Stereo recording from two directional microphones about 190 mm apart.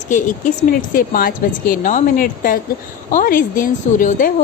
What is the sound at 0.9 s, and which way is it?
A woman's voice, 50° left (ahead or behind).